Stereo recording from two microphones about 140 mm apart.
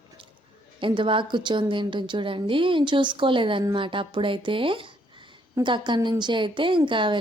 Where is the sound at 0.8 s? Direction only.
35° right (ahead or behind).